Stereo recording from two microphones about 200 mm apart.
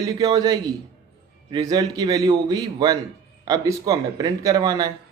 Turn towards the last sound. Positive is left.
turn(degrees=-15)  # may be behind; listen again after turning